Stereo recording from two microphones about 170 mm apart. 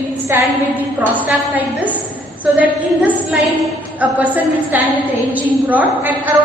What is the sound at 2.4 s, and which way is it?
A woman's voice, 10° right (ahead or behind).